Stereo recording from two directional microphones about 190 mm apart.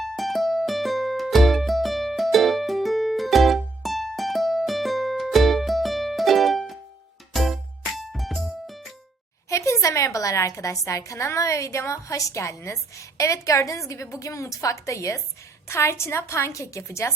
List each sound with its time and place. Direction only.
0.0 s music: centre (ahead or behind)
9.5 s a woman's voice: 15° left (ahead or behind)